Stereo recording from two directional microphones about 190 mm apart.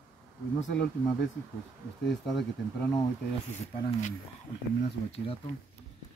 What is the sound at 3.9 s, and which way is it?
Speech, 40° left (ahead or behind).